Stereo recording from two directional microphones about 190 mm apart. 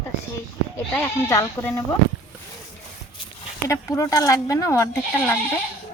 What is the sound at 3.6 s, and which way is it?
Speech, 15° left (ahead or behind).